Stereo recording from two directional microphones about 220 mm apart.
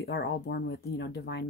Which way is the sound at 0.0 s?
50° left (ahead or behind).